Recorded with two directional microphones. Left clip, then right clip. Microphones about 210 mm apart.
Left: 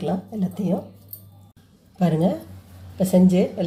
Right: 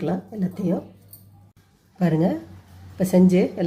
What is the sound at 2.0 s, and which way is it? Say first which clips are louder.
A woman's voice: even; 15° right (ahead or behind).